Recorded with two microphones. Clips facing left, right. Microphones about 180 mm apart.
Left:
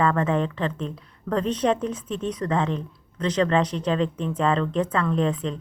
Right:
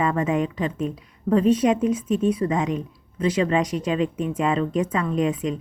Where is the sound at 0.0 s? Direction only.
10° right (ahead or behind).